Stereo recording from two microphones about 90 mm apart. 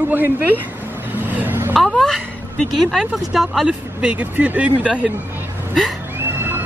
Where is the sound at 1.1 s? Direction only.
20° right (ahead or behind).